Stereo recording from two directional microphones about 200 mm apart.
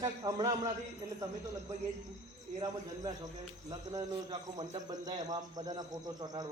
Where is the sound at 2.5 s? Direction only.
20° right (ahead or behind).